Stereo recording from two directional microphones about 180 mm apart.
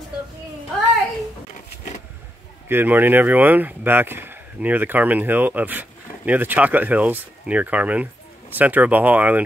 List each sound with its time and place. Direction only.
2.7 s speech: 10° right (ahead or behind)